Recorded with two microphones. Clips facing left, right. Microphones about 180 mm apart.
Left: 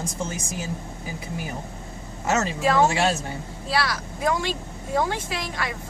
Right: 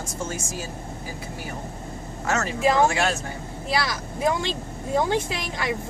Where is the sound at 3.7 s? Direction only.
20° right (ahead or behind).